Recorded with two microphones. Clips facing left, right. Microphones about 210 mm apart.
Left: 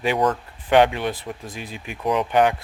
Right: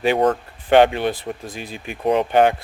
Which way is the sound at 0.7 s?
30° right (ahead or behind).